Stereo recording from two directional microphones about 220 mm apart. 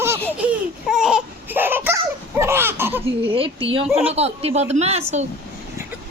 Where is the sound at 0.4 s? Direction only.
5° right (ahead or behind).